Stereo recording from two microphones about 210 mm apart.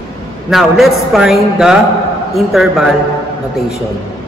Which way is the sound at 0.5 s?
Centre (ahead or behind).